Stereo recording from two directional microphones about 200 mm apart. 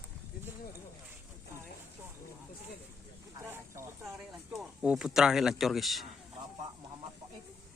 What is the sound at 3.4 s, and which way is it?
Vehicle, 15° right (ahead or behind).